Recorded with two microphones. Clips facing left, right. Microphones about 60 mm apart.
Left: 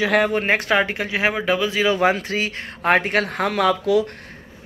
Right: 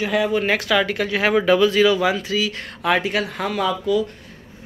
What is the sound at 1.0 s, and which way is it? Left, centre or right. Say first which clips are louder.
Speech: right 3 dB; centre.